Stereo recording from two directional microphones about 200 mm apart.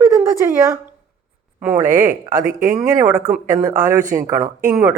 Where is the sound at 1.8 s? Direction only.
40° right (ahead or behind).